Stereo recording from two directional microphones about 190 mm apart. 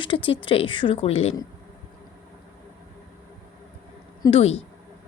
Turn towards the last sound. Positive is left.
turn(degrees=30)  # may be behind; listen again after turning